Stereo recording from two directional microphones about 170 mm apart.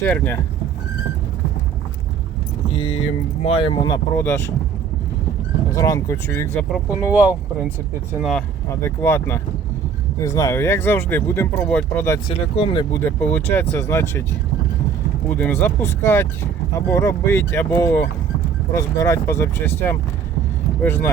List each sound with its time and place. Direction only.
0.0 s speech: 10° left (ahead or behind)
2.7 s speech: 35° left (ahead or behind)
4.2 s speech: 15° left (ahead or behind)
5.7 s speech: 20° left (ahead or behind)
6.5 s speech: 5° left (ahead or behind)
6.9 s speech: 10° right (ahead or behind)
8.2 s speech: 5° left (ahead or behind)
8.8 s speech: 15° left (ahead or behind)
12.3 s speech: 35° left (ahead or behind)
12.9 s speech: 10° left (ahead or behind)
15.4 s speech: 10° left (ahead or behind)